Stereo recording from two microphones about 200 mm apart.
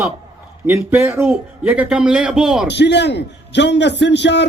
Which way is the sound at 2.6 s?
60° left (ahead or behind).